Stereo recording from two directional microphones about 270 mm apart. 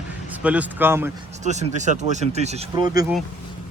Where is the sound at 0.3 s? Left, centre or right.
Centre.